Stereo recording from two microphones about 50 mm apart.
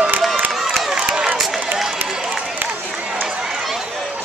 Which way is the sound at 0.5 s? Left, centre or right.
Centre.